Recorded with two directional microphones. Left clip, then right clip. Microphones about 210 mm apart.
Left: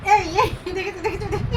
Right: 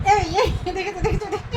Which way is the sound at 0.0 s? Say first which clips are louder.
Left 1 dB; 25° right (ahead or behind).